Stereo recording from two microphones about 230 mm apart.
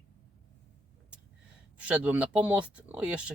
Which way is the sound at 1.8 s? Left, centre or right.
Centre.